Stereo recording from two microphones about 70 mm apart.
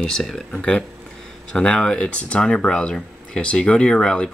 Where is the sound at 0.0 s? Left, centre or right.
Centre.